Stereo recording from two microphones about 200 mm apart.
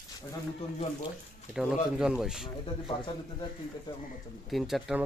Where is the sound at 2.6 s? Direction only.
25° left (ahead or behind).